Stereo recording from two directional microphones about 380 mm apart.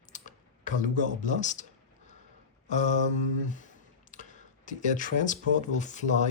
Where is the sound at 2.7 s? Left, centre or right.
Centre.